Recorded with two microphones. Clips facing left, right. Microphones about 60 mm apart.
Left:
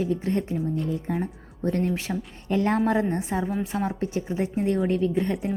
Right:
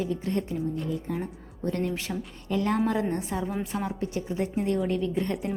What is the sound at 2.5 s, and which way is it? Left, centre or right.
A woman's voice, left.